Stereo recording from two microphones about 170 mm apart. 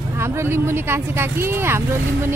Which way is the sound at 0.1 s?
15° right (ahead or behind).